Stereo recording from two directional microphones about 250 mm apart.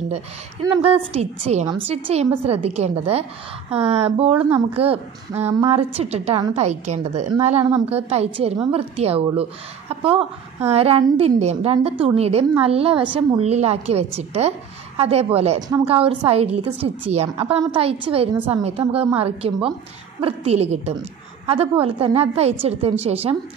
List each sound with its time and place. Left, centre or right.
0.8 s a woman's voice: right
4.4 s speech: centre
4.7 s a woman's voice: right